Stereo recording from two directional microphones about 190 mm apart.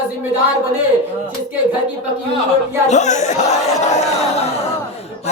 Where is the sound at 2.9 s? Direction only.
40° left (ahead or behind).